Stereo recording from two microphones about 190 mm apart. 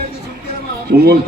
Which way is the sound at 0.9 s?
50° right (ahead or behind).